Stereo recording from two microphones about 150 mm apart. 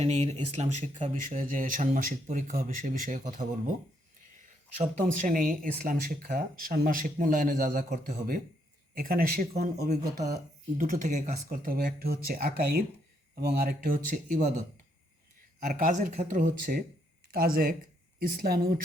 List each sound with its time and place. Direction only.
0.0 s speech: 45° right (ahead or behind); by 9.5 s 75° right (ahead or behind)
9.7 s speech: 90° right
10.8 s speech: 65° right (ahead or behind)
14.1 s speech: 65° right (ahead or behind)
15.6 s speech: 70° right (ahead or behind)
17.3 s speech: 80° right